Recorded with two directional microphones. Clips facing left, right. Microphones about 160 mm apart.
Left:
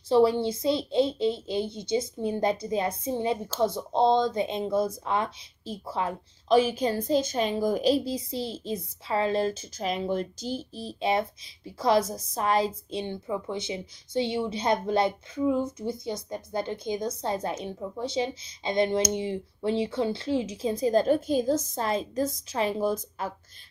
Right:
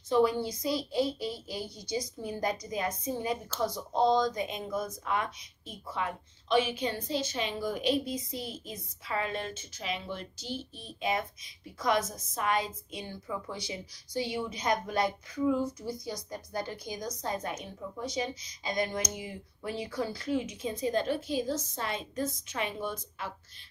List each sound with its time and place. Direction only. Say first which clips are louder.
0.1 s a woman's voice: left 5 dB; 30° left (ahead or behind)